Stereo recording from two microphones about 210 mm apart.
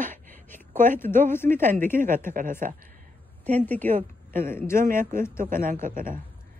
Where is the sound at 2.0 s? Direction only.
40° right (ahead or behind).